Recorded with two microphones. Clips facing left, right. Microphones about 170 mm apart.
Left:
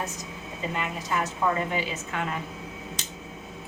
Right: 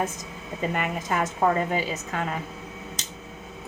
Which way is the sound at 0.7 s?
50° right (ahead or behind).